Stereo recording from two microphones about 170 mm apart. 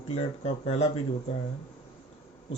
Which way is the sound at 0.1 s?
35° left (ahead or behind).